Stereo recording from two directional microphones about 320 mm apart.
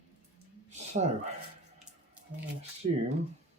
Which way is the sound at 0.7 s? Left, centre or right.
Right.